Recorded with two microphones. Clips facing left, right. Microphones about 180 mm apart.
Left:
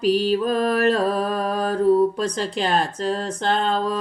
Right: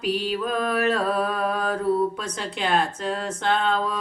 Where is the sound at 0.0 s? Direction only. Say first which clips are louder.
Left 6 dB; 35° left (ahead or behind).